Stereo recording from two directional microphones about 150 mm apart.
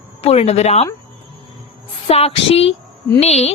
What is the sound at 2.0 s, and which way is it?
A woman's voice, 40° left (ahead or behind).